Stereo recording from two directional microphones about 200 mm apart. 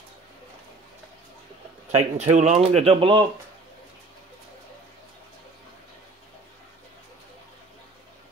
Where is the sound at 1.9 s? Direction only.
35° right (ahead or behind).